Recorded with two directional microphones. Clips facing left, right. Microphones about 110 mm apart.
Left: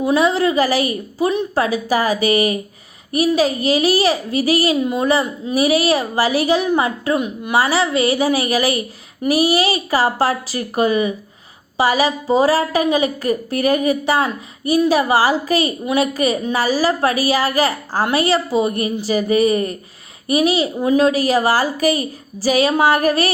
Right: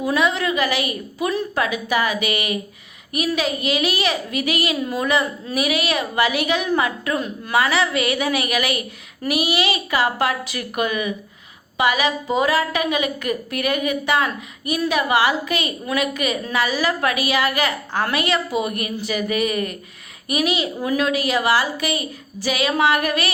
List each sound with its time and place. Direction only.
0.0 s a woman's voice: 30° left (ahead or behind)
4.8 s a woman's voice: 20° left (ahead or behind)
5.5 s a woman's voice: 35° left (ahead or behind)